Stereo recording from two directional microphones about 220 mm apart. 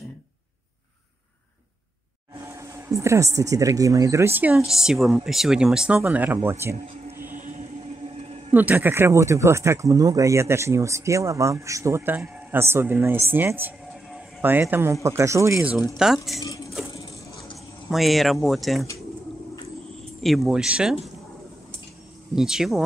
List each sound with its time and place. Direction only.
2.4 s speech: 15° right (ahead or behind)
6.6 s music: 10° right (ahead or behind)
7.3 s music: 35° right (ahead or behind)
8.2 s a sound: 25° right (ahead or behind)
8.5 s speech: 10° right (ahead or behind)
16.4 s a sound: 15° left (ahead or behind)
17.8 s speech: centre (ahead or behind)
20.2 s speech: centre (ahead or behind)
22.3 s speech: 5° right (ahead or behind)